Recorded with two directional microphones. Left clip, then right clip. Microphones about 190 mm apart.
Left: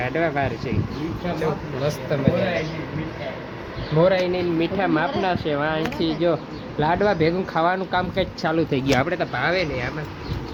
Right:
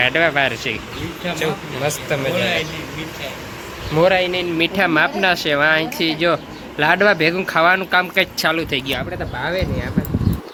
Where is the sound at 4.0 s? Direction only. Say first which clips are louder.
Right 3 dB; 20° right (ahead or behind).